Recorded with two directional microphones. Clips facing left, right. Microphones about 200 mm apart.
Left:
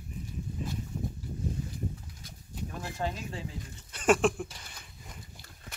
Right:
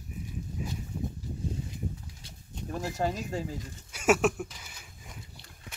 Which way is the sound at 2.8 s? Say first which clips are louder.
Right 5 dB; 40° right (ahead or behind).